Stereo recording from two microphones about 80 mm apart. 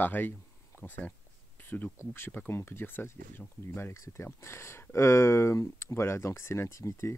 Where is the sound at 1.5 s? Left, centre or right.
Left.